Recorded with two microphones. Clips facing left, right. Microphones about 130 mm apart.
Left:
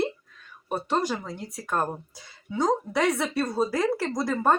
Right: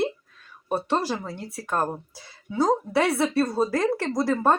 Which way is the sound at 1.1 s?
Centre (ahead or behind).